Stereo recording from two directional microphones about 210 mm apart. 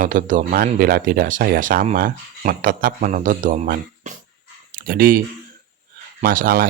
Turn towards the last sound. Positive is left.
turn(degrees=-45)  # may be behind; listen again after turning